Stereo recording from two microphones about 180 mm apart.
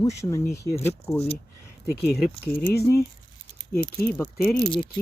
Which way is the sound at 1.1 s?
35° left (ahead or behind).